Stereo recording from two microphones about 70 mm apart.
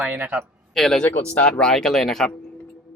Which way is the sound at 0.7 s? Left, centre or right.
Centre.